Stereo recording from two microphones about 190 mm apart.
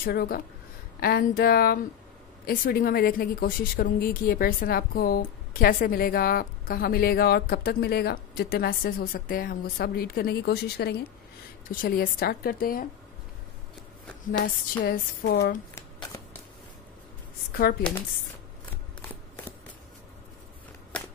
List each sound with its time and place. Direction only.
0.0 s speech: 55° left (ahead or behind)
11.7 s speech: 45° left (ahead or behind)
14.4 s speech: 50° left (ahead or behind)
15.2 s speech: 65° left (ahead or behind)
15.7 s shuffling cards: 15° left (ahead or behind)
17.6 s speech: 55° left (ahead or behind)